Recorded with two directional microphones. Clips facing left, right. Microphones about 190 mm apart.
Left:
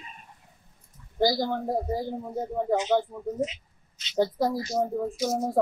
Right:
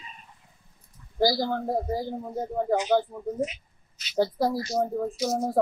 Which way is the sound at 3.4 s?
25° left (ahead or behind).